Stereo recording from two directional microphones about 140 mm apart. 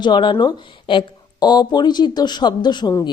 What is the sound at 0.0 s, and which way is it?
Speech, 35° left (ahead or behind).